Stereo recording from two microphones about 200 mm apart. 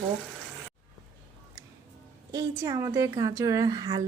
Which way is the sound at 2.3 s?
20° right (ahead or behind).